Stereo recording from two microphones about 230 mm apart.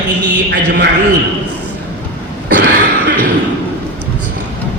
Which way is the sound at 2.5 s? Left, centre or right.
Right.